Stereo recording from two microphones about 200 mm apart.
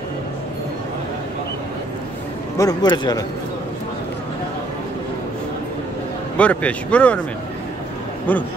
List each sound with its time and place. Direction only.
2.5 s speech: 20° left (ahead or behind)
6.3 s speech: 5° left (ahead or behind)
8.3 s speech: 10° left (ahead or behind)